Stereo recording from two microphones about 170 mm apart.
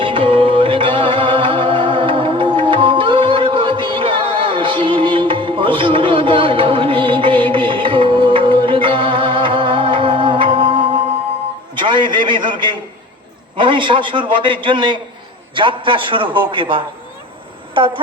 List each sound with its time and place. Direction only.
0.0 s music: 30° right (ahead or behind)
11.7 s a sound: 30° right (ahead or behind)
15.5 s a man's voice: 30° right (ahead or behind)